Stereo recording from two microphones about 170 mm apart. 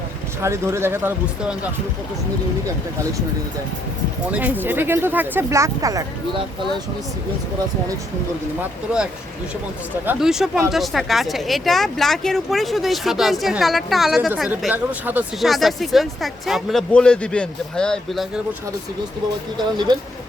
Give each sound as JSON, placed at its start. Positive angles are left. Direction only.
{"t": 0.4, "sound": "speech", "side_deg": -15}
{"t": 4.3, "sound": "speech", "side_deg": -10}
{"t": 10.1, "sound": "speech", "side_deg": -5}